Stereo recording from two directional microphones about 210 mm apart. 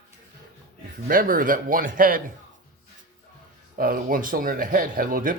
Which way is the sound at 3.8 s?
40° right (ahead or behind).